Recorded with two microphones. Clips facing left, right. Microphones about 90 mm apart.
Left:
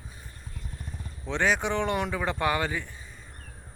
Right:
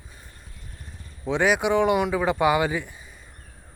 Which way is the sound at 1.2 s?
10° right (ahead or behind).